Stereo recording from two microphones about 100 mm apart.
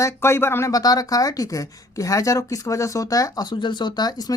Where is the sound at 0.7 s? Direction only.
40° left (ahead or behind).